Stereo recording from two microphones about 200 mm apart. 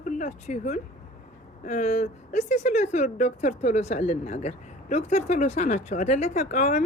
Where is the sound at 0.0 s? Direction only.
40° left (ahead or behind).